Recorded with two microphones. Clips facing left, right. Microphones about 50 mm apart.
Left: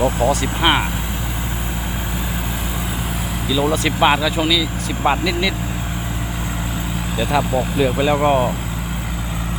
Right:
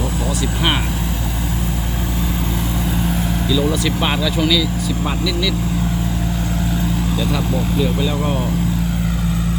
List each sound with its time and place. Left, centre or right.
0.0 s speech: left
3.5 s speech: centre
5.0 s speech: left
7.8 s speech: left